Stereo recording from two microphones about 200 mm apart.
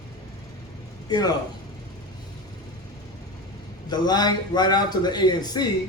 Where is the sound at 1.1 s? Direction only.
20° left (ahead or behind).